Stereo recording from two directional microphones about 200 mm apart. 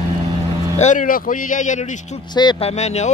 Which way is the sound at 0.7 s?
40° left (ahead or behind).